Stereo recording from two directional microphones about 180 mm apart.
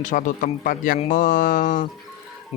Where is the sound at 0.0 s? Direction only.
45° left (ahead or behind).